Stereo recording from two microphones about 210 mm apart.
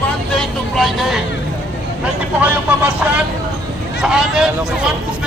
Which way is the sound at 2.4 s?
5° right (ahead or behind).